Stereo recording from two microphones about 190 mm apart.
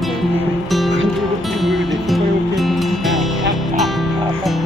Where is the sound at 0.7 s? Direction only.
Centre (ahead or behind).